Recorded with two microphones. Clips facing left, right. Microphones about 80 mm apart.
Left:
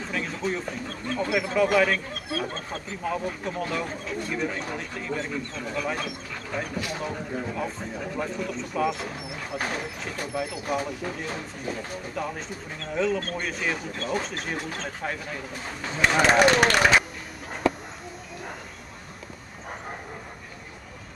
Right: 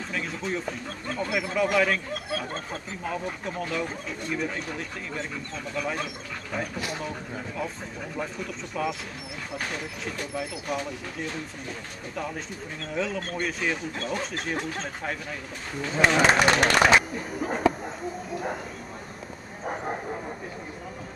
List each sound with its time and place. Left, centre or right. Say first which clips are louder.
0.1 s speech: left 2 dB; centre
12.8 s speech: left 4 dB; centre
17.4 s a sound: right 9 dB; right